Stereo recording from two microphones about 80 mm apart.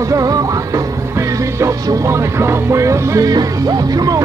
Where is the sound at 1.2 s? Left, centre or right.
Right.